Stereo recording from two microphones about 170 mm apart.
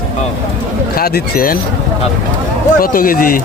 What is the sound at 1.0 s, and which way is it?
Speech, 60° left (ahead or behind).